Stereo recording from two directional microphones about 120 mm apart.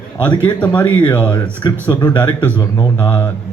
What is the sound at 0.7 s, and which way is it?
Speech, 15° left (ahead or behind).